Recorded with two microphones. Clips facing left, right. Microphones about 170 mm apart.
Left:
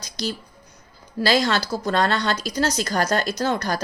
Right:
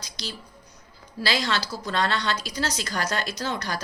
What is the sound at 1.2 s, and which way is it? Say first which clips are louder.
Speech: left 6 dB; 45° left (ahead or behind).